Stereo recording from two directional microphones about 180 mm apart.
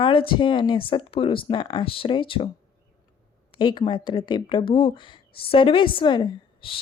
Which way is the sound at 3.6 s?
25° left (ahead or behind).